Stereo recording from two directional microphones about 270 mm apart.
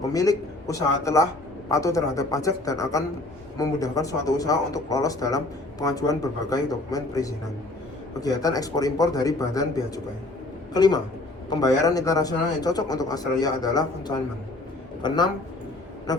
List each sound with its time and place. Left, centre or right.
0.0 s a man's voice: centre